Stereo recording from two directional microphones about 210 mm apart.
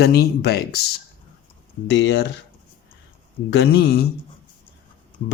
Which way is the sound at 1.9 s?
55° left (ahead or behind).